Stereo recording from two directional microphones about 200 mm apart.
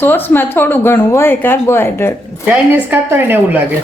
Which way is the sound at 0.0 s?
10° left (ahead or behind).